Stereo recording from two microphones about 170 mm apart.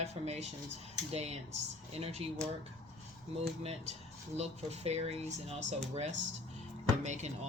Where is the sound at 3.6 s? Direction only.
40° right (ahead or behind).